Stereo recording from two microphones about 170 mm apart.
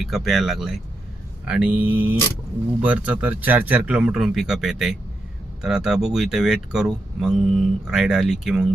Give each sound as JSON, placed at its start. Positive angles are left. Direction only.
{"t": 0.0, "sound": "speech", "side_deg": 0}